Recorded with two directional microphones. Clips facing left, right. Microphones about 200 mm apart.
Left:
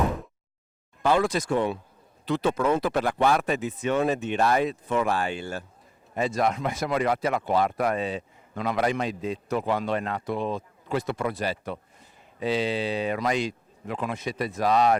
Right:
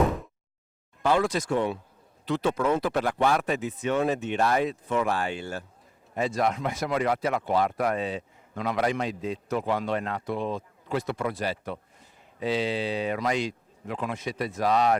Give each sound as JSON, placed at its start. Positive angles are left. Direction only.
{"t": 1.0, "sound": "speech", "side_deg": 15}